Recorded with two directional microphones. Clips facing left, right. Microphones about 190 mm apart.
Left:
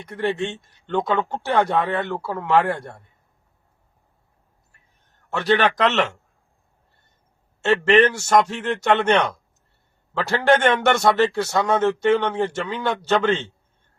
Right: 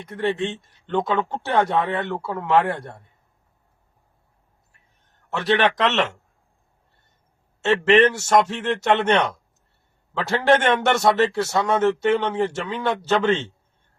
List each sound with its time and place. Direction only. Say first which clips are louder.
0.1 s speech: even; centre (ahead or behind)
5.3 s speech: left 1 dB; centre (ahead or behind)
7.6 s speech: even; 5° right (ahead or behind)